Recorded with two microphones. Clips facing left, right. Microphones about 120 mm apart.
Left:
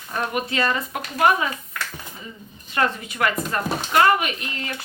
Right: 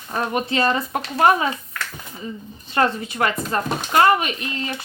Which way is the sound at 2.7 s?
30° right (ahead or behind).